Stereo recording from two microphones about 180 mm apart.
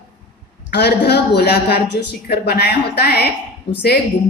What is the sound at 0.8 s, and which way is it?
A woman's voice, 65° left (ahead or behind).